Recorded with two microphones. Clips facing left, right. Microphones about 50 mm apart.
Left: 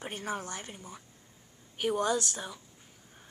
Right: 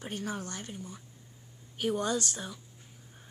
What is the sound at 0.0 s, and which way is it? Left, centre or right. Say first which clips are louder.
Speech: left 1 dB; left.